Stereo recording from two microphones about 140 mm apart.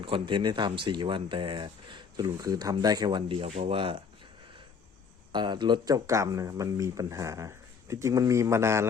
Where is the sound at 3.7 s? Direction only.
40° right (ahead or behind).